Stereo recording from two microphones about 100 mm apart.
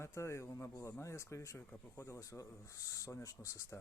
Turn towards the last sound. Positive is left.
turn(degrees=30)  # may be behind; listen again after turning